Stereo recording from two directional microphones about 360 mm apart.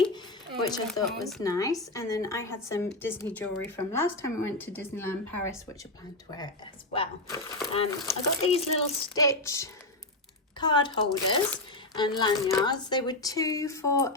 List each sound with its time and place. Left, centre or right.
0.7 s speech: centre
6.9 s speech: centre